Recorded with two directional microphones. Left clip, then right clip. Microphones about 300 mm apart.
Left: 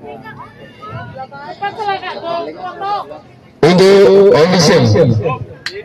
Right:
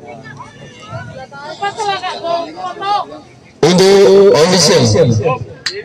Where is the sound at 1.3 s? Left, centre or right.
Right.